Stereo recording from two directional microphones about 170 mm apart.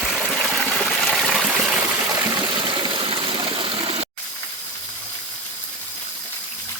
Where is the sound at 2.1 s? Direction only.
25° right (ahead or behind).